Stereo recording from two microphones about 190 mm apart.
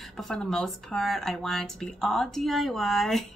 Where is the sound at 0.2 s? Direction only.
5° left (ahead or behind).